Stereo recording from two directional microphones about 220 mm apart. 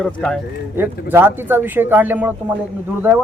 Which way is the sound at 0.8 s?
10° right (ahead or behind).